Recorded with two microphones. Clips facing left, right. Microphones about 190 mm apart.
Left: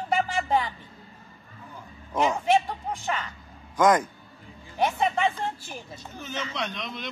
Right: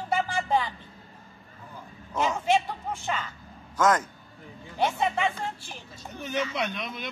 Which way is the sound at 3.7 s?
10° left (ahead or behind).